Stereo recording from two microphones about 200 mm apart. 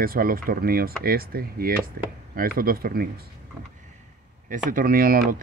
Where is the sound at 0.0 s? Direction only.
45° right (ahead or behind).